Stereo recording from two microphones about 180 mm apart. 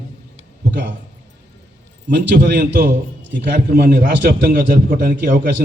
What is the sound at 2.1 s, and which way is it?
A man's voice, 70° right (ahead or behind).